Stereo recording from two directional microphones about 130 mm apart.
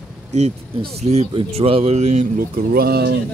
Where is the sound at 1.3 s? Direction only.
50° right (ahead or behind); by 2.6 s 75° right (ahead or behind).